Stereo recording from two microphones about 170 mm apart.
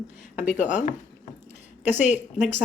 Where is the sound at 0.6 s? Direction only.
45° left (ahead or behind).